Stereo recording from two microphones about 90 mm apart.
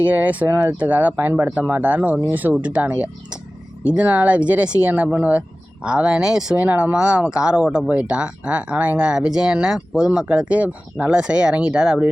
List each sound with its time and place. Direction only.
0.0 s speech: 20° right (ahead or behind)